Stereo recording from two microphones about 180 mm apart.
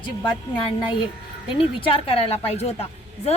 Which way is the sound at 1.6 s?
30° left (ahead or behind).